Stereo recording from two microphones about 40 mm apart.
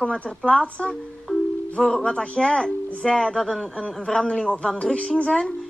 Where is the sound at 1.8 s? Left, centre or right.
Left.